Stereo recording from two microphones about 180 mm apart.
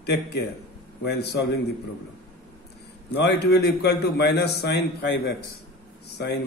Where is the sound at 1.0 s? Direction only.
70° left (ahead or behind).